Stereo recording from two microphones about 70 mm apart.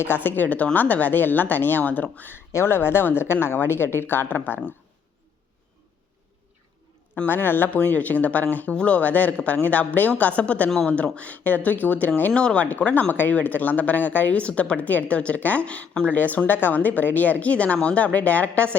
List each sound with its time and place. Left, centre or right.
0.0 s speech: left
2.5 s speech: left
7.3 s speech: left
12.3 s speech: centre